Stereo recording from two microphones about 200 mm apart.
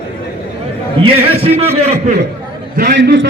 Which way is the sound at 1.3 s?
30° right (ahead or behind).